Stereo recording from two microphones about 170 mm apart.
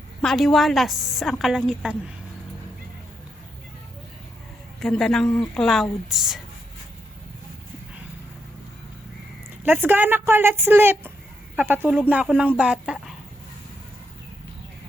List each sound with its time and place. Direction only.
0.2 s a woman's voice: centre (ahead or behind)
4.8 s a woman's voice: centre (ahead or behind)
9.6 s a woman's voice: 10° right (ahead or behind)